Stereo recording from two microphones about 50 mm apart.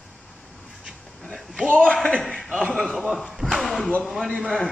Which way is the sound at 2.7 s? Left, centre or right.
Centre.